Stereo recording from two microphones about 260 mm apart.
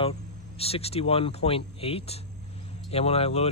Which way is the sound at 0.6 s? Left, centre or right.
Left.